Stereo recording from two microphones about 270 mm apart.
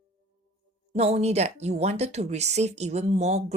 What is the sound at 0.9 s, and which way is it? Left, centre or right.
Speech, right.